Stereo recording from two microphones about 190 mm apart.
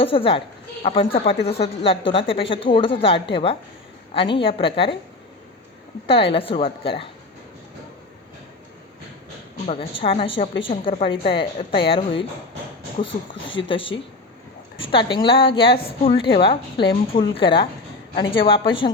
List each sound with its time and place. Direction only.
0.0 s a woman's voice: 30° left (ahead or behind)
6.1 s a woman's voice: 30° left (ahead or behind)
9.6 s a woman's voice: 30° left (ahead or behind)
13.3 s speech: 80° left
13.7 s a woman's voice: 30° left (ahead or behind)